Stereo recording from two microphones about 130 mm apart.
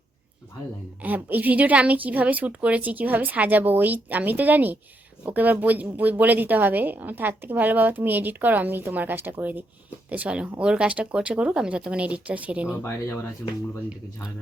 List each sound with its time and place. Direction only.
1.0 s speech: 15° right (ahead or behind)
12.8 s speech: 20° left (ahead or behind)